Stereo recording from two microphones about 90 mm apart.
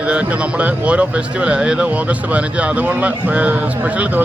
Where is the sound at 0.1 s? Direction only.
15° right (ahead or behind).